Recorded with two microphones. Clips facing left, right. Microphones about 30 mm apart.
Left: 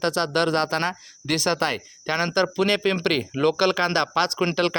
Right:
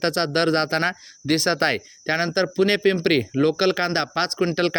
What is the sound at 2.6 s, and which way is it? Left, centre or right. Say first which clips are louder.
Speech: right 1 dB; left.